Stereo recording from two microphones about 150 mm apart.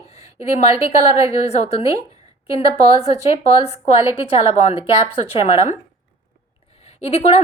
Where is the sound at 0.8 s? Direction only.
45° left (ahead or behind).